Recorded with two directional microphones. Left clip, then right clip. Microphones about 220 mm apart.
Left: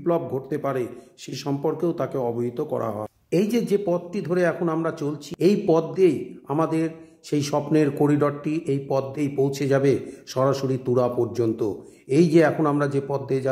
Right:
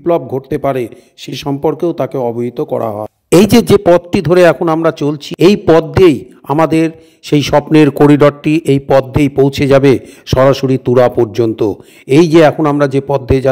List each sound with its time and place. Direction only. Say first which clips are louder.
0.0 s a man's voice: right 11 dB; 35° right (ahead or behind)
3.3 s a man's voice: right 15 dB; 50° right (ahead or behind)